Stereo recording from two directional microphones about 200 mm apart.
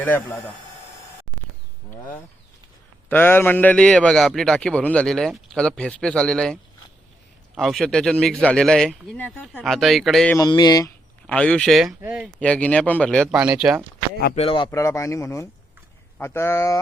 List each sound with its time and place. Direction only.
0.0 s a man's voice: 10° left (ahead or behind)
1.9 s a sound: 10° left (ahead or behind)
3.1 s a man's voice: 10° left (ahead or behind)
10.3 s speech: 20° left (ahead or behind)
11.3 s a man's voice: 5° left (ahead or behind)
12.4 s a man's voice: 5° left (ahead or behind)
14.3 s speech: 25° left (ahead or behind)
14.7 s a man's voice: 15° left (ahead or behind)